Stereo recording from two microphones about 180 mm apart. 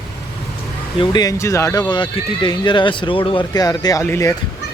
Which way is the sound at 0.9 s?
20° left (ahead or behind).